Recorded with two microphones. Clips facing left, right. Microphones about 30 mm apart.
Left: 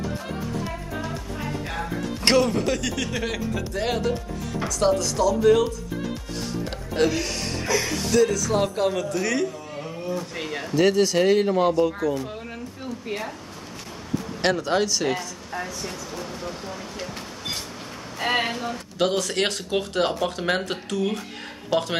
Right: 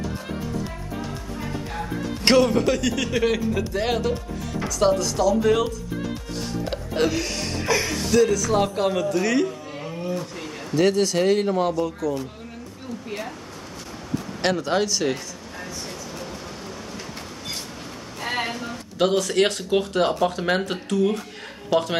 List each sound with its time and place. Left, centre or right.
2.2 s speech: centre
6.6 s music: centre
7.8 s speech: centre
10.7 s speech: centre
14.4 s speech: centre
15.5 s vehicle: left
18.9 s speech: centre